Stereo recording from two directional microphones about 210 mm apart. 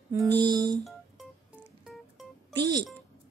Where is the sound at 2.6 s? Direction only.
20° right (ahead or behind).